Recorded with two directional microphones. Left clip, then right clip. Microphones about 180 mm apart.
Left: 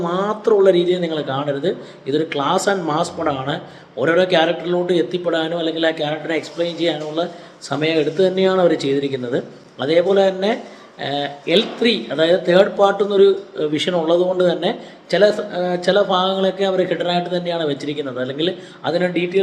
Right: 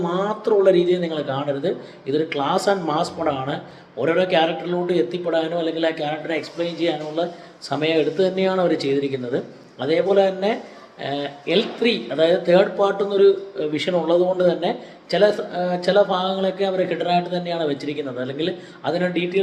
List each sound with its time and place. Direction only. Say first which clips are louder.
0.0 s speech: left 3 dB; 15° left (ahead or behind)